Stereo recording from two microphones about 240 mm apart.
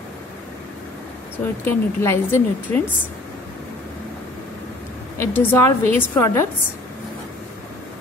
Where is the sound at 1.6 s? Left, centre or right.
Centre.